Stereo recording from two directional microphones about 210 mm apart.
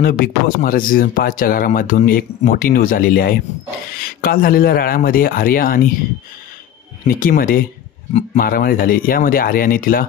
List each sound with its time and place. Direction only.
0.0 s speech: 45° left (ahead or behind)
7.1 s speech: 45° left (ahead or behind)